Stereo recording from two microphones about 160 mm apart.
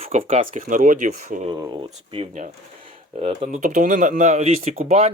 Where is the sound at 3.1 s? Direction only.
40° right (ahead or behind).